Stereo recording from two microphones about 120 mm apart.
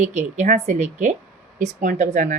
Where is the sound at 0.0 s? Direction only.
80° right.